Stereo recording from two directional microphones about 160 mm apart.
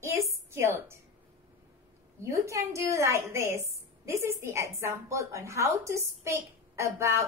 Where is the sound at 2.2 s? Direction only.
20° right (ahead or behind).